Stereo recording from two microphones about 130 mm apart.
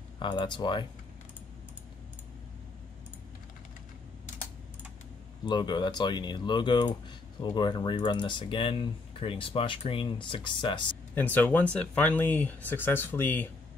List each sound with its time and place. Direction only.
0.2 s speech: 35° left (ahead or behind)
5.4 s speech: 35° left (ahead or behind)
11.1 s speech: 15° left (ahead or behind)